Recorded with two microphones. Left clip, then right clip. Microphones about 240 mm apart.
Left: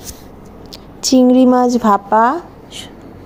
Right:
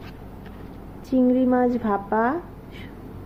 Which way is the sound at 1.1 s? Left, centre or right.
Left.